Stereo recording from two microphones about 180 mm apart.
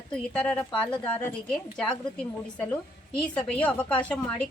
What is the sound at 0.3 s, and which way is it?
Speech, 5° left (ahead or behind).